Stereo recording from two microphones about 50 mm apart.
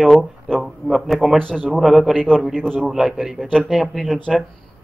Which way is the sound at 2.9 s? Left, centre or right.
Centre.